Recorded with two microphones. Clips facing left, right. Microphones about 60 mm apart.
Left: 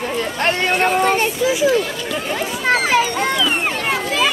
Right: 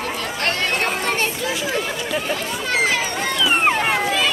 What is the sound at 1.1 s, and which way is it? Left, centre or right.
Children playing, centre.